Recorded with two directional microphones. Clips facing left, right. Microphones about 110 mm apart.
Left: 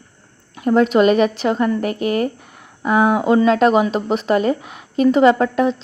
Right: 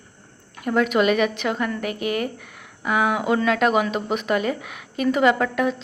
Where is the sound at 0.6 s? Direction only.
30° left (ahead or behind).